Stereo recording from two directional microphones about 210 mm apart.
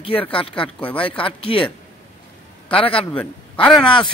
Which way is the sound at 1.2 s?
25° left (ahead or behind).